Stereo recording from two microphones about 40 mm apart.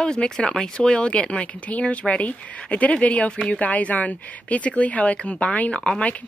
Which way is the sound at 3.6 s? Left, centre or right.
Left.